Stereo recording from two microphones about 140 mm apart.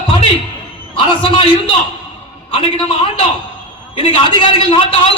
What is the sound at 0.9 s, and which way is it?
Speech, 40° left (ahead or behind).